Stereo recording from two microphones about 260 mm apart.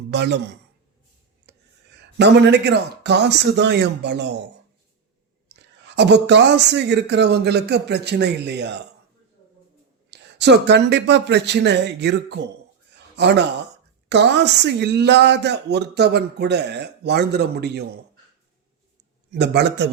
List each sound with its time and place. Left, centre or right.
0.1 s speech: right
1.5 s a sound: right
2.1 s speech: right
5.8 s speech: right
10.1 s a man's voice: right
19.3 s speech: right